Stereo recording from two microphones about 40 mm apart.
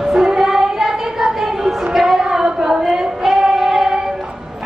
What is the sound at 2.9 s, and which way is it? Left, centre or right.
Female singing, centre.